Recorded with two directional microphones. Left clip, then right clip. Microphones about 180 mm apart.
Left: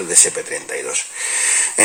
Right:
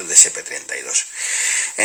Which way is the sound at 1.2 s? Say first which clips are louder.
Left 3 dB; 20° right (ahead or behind).